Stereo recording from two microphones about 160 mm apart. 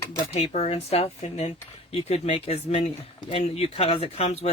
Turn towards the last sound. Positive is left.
turn(degrees=40)  # may be behind; listen again after turning